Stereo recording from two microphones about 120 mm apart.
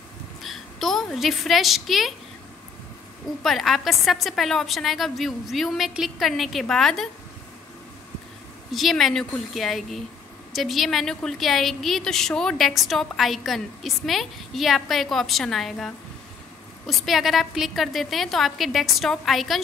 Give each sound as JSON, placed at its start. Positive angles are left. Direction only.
{"t": 0.4, "sound": "a woman's voice", "side_deg": 0}
{"t": 3.4, "sound": "a woman's voice", "side_deg": 0}
{"t": 8.7, "sound": "a woman's voice", "side_deg": 0}